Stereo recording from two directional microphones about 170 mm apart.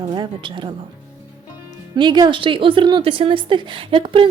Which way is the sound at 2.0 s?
25° right (ahead or behind).